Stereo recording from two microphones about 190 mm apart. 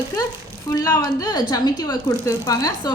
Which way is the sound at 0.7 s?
20° left (ahead or behind).